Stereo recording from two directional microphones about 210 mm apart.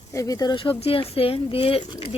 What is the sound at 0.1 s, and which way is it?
Speech, 15° left (ahead or behind).